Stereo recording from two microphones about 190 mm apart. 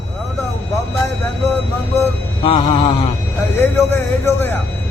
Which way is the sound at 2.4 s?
25° left (ahead or behind).